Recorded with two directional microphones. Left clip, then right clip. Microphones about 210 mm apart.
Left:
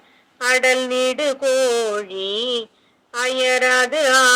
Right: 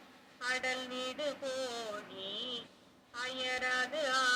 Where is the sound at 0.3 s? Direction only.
55° left (ahead or behind).